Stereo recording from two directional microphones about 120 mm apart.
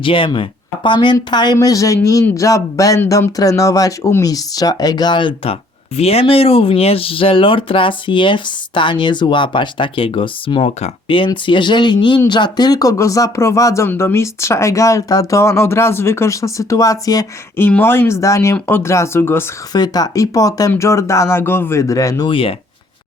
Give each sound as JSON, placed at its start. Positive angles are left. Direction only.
{"t": 0.0, "sound": "speech", "side_deg": 45}
{"t": 11.4, "sound": "speech", "side_deg": 40}
{"t": 17.6, "sound": "speech", "side_deg": 15}
{"t": 19.7, "sound": "speech", "side_deg": 35}
{"t": 22.3, "sound": "speech", "side_deg": 50}